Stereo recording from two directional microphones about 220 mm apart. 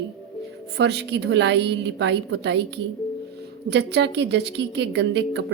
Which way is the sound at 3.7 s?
50° right (ahead or behind).